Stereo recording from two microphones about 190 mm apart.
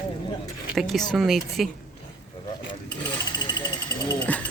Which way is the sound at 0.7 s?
Centre (ahead or behind).